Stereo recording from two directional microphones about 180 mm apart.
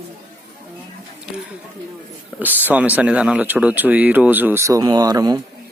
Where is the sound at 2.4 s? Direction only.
10° right (ahead or behind).